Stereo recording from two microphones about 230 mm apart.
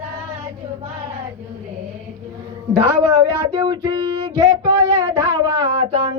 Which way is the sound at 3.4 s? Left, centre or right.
Centre.